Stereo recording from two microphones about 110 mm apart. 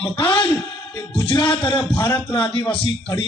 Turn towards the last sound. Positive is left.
turn(degrees=50)  # may be behind; listen again after turning